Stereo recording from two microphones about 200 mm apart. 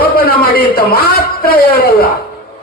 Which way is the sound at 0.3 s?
50° left (ahead or behind).